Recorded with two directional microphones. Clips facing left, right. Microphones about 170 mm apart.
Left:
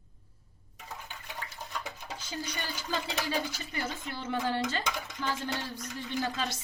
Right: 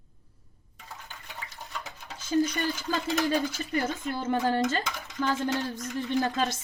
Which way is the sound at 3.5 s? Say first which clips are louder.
Right 7 dB; 50° right (ahead or behind).